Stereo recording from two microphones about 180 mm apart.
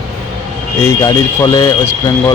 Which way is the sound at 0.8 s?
15° left (ahead or behind).